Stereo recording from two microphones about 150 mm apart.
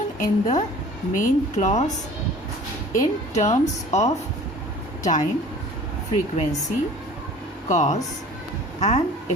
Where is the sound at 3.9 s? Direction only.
50° left (ahead or behind).